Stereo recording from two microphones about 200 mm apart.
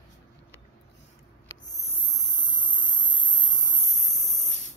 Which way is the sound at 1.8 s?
30° left (ahead or behind).